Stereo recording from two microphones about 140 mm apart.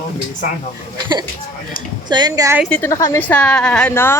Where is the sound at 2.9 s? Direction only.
25° left (ahead or behind).